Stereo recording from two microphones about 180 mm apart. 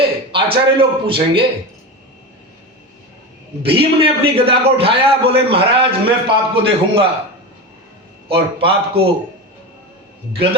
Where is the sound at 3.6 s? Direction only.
30° right (ahead or behind).